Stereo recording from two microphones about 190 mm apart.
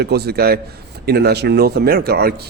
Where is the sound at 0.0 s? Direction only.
60° right (ahead or behind).